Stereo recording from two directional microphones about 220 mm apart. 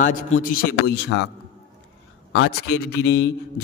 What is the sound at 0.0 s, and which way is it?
A man's voice, 40° left (ahead or behind).